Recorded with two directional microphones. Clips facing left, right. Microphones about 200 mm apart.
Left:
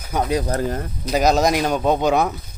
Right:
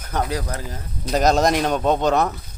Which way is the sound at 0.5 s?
60° left (ahead or behind).